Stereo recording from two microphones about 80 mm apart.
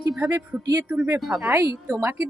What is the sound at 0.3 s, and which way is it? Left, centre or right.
Speech, right.